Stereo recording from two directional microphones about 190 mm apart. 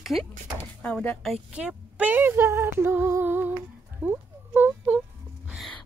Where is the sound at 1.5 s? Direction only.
5° right (ahead or behind).